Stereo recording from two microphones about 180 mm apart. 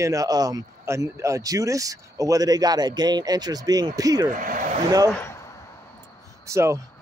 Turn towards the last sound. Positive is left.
turn(degrees=-15)  # may be behind; listen again after turning